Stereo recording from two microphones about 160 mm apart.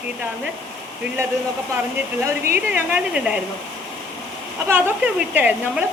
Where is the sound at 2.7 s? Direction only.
10° right (ahead or behind).